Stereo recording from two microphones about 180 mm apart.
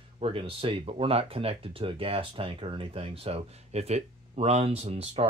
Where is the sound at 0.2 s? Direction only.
30° right (ahead or behind).